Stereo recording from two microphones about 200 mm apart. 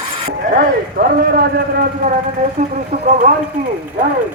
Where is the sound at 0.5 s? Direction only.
45° right (ahead or behind).